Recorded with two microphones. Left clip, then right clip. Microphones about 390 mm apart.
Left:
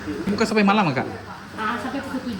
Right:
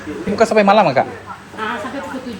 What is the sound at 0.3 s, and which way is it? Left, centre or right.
Speech, centre.